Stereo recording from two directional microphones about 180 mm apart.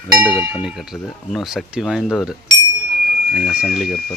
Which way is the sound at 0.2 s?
10° right (ahead or behind).